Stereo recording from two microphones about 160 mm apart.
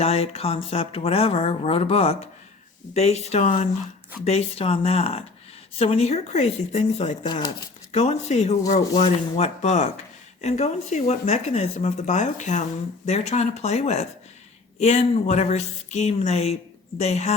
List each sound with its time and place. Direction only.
0.0 s speech: 40° left (ahead or behind)
7.3 s speech: 25° left (ahead or behind)
7.9 s speech: 45° left (ahead or behind)